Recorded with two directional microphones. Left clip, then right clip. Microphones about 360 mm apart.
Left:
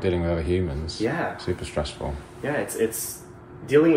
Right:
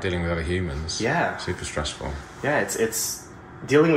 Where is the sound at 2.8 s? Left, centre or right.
Right.